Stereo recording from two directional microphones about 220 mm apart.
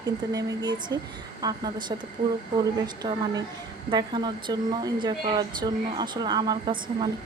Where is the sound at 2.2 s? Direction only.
40° right (ahead or behind).